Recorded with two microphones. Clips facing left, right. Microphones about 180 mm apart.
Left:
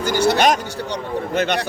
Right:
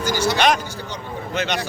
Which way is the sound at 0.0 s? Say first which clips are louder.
Left 4 dB; 60° left (ahead or behind).